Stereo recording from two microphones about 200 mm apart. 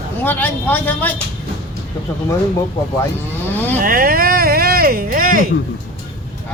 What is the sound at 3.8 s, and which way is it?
Speech, 45° right (ahead or behind).